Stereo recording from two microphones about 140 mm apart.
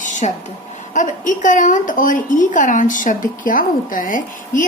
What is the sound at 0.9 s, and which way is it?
A woman's voice, 65° left (ahead or behind).